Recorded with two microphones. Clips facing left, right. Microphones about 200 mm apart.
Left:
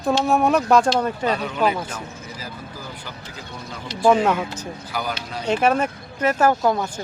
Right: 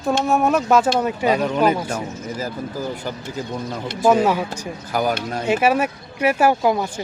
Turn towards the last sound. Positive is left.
turn(degrees=-10)  # may be behind; listen again after turning